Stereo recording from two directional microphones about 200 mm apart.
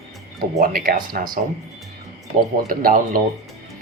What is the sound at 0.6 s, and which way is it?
Speech, 45° right (ahead or behind).